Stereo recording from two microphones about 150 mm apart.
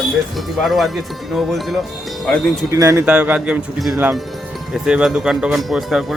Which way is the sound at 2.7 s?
20° right (ahead or behind).